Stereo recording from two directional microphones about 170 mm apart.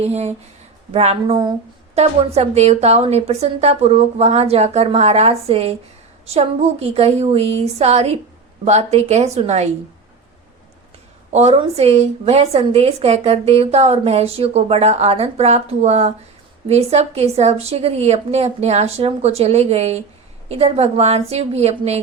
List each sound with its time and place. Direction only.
0.0 s a woman's voice: 40° right (ahead or behind)
11.3 s a woman's voice: 40° right (ahead or behind)